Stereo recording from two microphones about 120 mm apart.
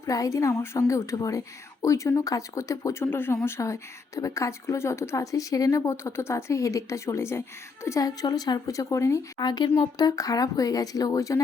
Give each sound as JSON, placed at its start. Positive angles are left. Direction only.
{"t": 0.0, "sound": "speech", "side_deg": 25}